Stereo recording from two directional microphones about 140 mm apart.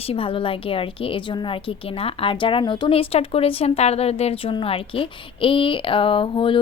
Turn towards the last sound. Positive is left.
turn(degrees=40)  # may be behind; listen again after turning